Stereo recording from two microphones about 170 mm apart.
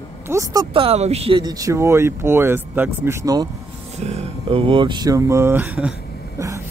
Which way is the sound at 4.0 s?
40° right (ahead or behind).